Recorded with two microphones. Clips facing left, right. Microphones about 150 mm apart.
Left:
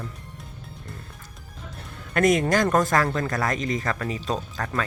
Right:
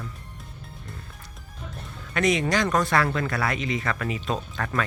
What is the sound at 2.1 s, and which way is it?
Speech, 50° left (ahead or behind).